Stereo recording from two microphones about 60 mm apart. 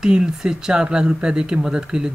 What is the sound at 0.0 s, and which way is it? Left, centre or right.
Speech, centre.